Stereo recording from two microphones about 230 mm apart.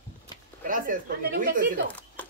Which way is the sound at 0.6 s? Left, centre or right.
Right.